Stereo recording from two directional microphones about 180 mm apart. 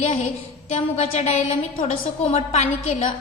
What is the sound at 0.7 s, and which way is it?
A woman's voice, 40° left (ahead or behind).